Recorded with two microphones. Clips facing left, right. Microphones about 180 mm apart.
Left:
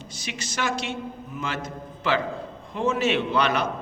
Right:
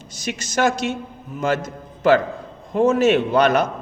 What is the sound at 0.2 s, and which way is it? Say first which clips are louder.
A man's voice: right 9 dB; 45° right (ahead or behind).